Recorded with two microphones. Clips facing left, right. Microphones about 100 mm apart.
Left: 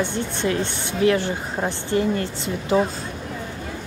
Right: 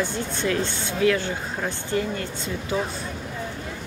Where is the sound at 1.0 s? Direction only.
30° left (ahead or behind).